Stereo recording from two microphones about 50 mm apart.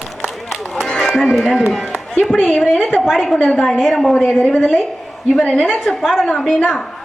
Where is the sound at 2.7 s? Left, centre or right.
Centre.